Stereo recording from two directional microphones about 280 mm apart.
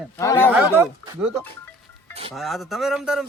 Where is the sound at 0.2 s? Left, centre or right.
Centre.